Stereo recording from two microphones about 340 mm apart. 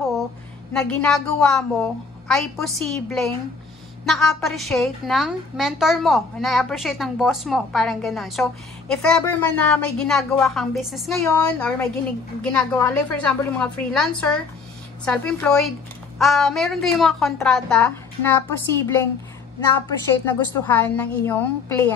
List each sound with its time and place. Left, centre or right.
0.7 s a woman's voice: centre
20.2 s a woman's voice: centre